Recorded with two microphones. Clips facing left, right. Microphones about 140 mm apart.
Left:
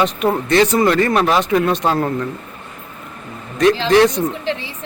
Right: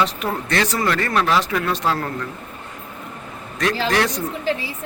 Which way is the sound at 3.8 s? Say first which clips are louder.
Left 8 dB; 20° left (ahead or behind).